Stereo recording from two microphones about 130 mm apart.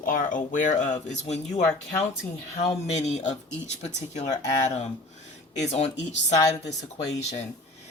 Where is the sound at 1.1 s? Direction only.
60° left (ahead or behind).